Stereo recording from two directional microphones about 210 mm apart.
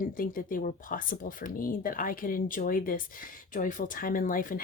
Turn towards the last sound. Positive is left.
turn(degrees=40)  # may be behind; listen again after turning